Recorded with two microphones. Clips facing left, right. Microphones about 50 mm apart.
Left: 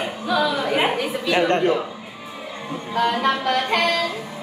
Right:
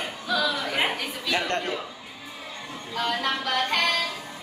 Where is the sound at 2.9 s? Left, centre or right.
Centre.